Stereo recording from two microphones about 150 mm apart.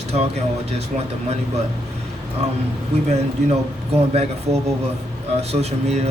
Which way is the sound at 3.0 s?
45° right (ahead or behind).